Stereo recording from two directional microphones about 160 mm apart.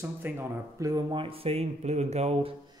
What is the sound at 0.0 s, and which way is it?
Speech, 15° right (ahead or behind).